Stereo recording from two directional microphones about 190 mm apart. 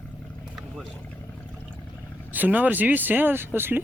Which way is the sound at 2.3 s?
10° right (ahead or behind).